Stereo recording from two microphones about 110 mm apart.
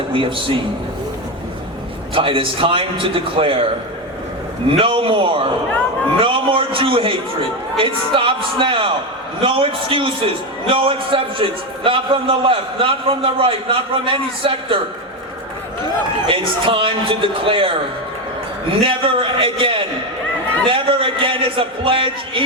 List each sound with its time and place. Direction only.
0.1 s a man's voice: 50° right (ahead or behind)
2.1 s a man's voice: 55° right (ahead or behind)
4.8 s a man's voice: 55° right (ahead or behind)
16.2 s a man's voice: 50° right (ahead or behind)